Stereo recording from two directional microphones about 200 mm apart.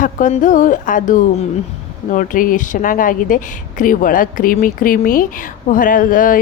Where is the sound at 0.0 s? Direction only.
40° left (ahead or behind).